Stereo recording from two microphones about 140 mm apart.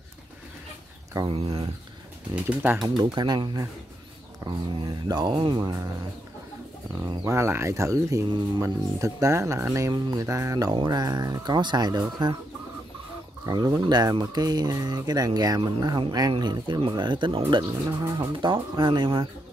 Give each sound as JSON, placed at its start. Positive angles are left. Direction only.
{"t": 1.1, "sound": "speech", "side_deg": -40}
{"t": 2.8, "sound": "speech", "side_deg": -30}
{"t": 7.0, "sound": "speech", "side_deg": -25}
{"t": 13.5, "sound": "speech", "side_deg": -30}